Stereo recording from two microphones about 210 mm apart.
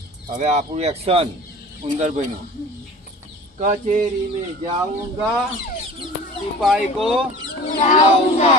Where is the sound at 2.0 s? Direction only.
35° right (ahead or behind).